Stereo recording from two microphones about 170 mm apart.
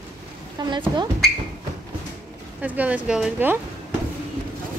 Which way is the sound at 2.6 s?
10° right (ahead or behind).